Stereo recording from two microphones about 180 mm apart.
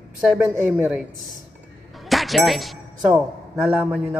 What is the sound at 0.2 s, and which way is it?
Speech, 5° right (ahead or behind).